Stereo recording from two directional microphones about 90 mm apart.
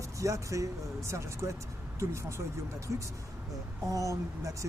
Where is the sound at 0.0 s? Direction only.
35° right (ahead or behind).